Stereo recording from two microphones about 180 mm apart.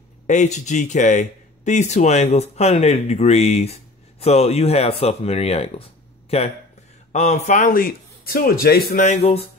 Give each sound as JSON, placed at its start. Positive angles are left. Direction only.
{"t": 0.3, "sound": "speech", "side_deg": 40}
{"t": 7.1, "sound": "speech", "side_deg": 40}
{"t": 9.0, "sound": "speech", "side_deg": 35}